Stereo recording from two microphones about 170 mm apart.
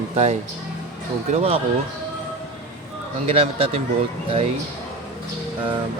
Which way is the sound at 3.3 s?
35° right (ahead or behind).